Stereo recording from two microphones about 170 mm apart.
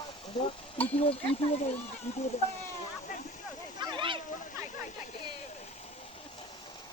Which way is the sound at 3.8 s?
30° right (ahead or behind).